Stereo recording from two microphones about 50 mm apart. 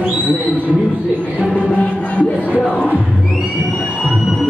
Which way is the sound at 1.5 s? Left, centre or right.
Left.